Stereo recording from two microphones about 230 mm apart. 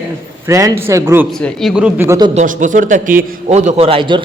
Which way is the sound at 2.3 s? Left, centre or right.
Right.